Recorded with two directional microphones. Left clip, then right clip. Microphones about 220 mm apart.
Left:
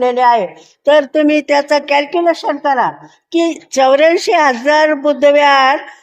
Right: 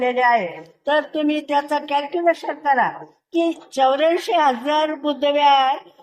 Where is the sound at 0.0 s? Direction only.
45° left (ahead or behind).